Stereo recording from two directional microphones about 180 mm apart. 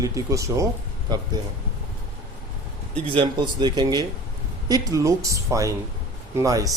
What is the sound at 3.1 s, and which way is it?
Speech, 25° right (ahead or behind).